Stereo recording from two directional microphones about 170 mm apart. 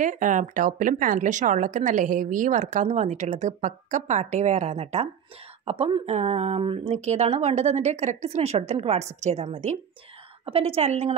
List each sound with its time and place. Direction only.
0.0 s a woman's voice: 50° right (ahead or behind)